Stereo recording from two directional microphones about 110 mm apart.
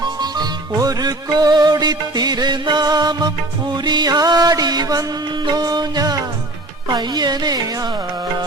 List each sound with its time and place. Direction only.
0.0 s music: 40° right (ahead or behind)